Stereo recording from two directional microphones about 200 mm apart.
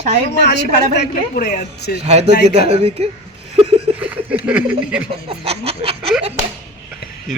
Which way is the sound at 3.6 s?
30° right (ahead or behind).